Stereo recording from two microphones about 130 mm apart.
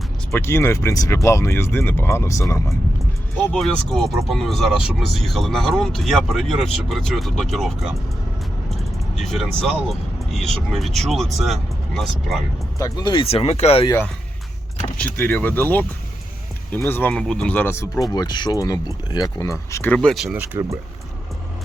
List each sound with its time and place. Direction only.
0.3 s speech: 20° left (ahead or behind)
3.3 s speech: 5° left (ahead or behind)
8.7 s vehicle: centre (ahead or behind)
9.9 s speech: centre (ahead or behind)
12.8 s speech: 35° left (ahead or behind); by 13.8 s 55° left (ahead or behind)
15.0 s speech: 15° left (ahead or behind)
18.1 s speech: 30° left (ahead or behind); by 20.4 s centre (ahead or behind)
20.4 s speech: 20° right (ahead or behind)